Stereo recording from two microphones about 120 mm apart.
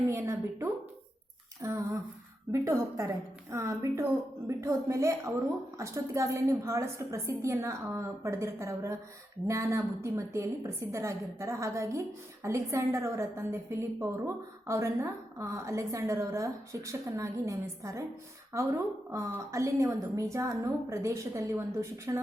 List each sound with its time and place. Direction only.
0.1 s a woman's voice: 25° right (ahead or behind)
19.1 s a woman's voice: 25° right (ahead or behind)